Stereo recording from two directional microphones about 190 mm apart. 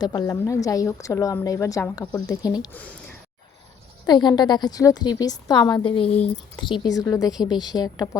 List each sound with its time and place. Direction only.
0.0 s a woman's voice: 20° left (ahead or behind)
2.7 s a woman's voice: 5° left (ahead or behind)
4.0 s a woman's voice: 20° left (ahead or behind)